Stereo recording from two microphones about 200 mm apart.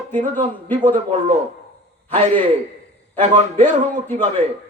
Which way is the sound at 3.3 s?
35° right (ahead or behind).